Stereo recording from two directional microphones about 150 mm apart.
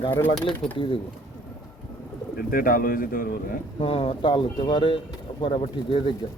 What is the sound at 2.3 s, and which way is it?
Speech, 70° left (ahead or behind).